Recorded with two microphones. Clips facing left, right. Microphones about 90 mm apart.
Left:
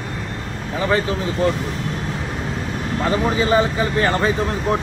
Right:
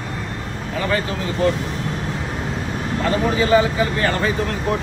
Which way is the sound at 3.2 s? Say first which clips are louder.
Right 2 dB; 25° left (ahead or behind).